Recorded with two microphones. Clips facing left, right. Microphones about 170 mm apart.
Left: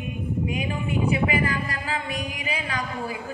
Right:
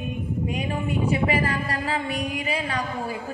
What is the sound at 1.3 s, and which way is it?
A woman's voice, 30° right (ahead or behind).